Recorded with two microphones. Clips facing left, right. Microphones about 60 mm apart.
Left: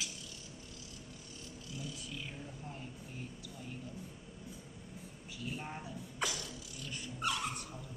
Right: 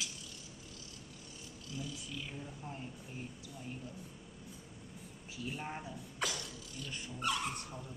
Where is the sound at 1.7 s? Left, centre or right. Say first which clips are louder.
Right 2 dB; centre.